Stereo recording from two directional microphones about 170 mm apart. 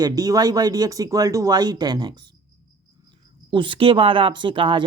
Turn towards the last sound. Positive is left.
turn(degrees=-30)  # may be behind; listen again after turning